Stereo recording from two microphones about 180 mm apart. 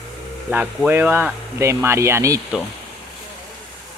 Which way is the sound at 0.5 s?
5° right (ahead or behind).